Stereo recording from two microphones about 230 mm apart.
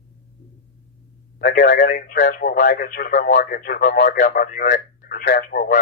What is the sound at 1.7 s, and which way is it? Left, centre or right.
Speech, left.